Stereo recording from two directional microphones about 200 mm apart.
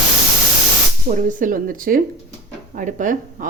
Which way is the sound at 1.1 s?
40° right (ahead or behind).